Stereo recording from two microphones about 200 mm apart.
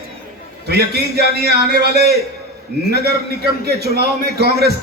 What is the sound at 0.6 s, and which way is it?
A man's voice, 55° right (ahead or behind).